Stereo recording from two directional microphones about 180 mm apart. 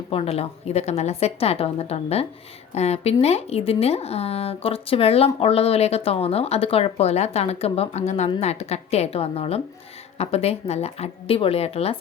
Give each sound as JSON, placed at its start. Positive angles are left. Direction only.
{"t": 0.1, "sound": "speech", "side_deg": 30}